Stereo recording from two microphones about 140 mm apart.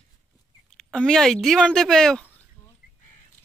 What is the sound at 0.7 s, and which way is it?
Speech, 5° left (ahead or behind).